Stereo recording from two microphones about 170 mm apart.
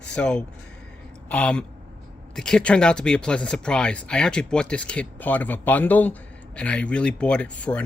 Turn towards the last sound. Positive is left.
turn(degrees=5)  # may be behind; listen again after turning